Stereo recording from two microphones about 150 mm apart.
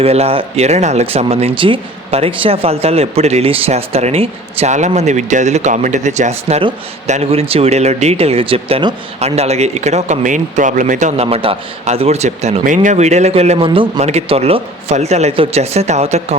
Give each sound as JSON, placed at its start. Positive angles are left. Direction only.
{"t": 0.0, "sound": "speech", "side_deg": -40}
{"t": 13.7, "sound": "a man's voice", "side_deg": -30}
{"t": 14.0, "sound": "speech", "side_deg": -45}